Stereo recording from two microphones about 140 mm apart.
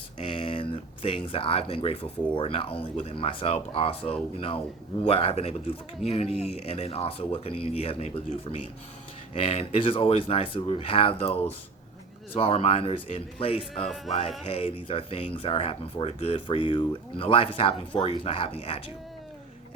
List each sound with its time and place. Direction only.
0.2 s speech: 40° left (ahead or behind)
13.8 s music: centre (ahead or behind)
14.4 s speech: 40° left (ahead or behind)